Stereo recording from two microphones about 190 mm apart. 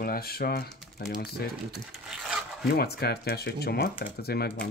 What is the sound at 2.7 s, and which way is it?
Speech, 55° left (ahead or behind).